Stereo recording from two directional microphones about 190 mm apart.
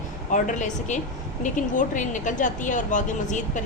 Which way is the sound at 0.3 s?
40° left (ahead or behind).